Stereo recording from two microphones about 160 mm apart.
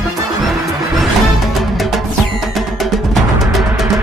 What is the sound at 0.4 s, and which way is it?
Music, centre (ahead or behind).